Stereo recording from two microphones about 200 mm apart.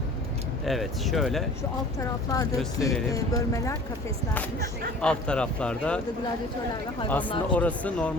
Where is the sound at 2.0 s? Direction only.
15° left (ahead or behind).